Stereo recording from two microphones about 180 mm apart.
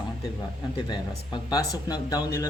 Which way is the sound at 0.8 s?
25° left (ahead or behind).